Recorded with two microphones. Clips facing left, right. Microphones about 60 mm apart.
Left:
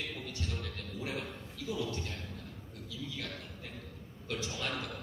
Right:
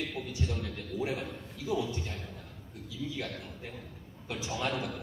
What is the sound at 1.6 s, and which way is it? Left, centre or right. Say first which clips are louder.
Speech: right 4 dB; right.